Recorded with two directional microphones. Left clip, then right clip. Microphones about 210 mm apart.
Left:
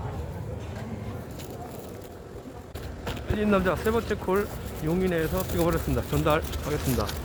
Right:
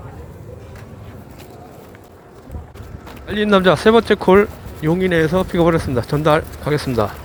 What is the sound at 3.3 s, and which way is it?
Speech, 25° right (ahead or behind).